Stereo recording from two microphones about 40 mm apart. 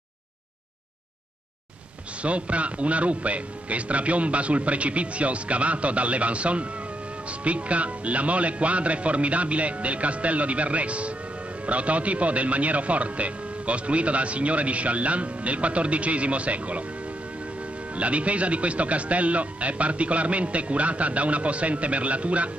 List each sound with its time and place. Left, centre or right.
2.2 s speech: right
17.9 s speech: right